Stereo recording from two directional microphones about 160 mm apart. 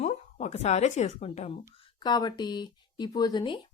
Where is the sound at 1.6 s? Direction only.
25° left (ahead or behind).